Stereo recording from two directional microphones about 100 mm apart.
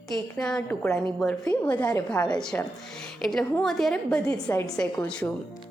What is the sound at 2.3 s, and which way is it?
A woman's voice, 5° left (ahead or behind).